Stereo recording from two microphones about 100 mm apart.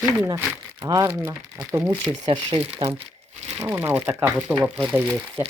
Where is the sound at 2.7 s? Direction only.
70° right (ahead or behind).